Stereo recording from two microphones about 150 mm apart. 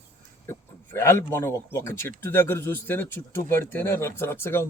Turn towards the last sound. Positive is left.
turn(degrees=15)  # may be behind; listen again after turning